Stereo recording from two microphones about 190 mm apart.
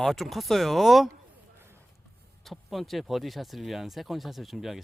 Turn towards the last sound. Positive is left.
turn(degrees=0)  # may be behind; listen again after turning